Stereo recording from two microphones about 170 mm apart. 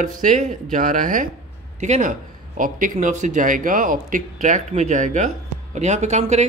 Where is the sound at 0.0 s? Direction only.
50° right (ahead or behind).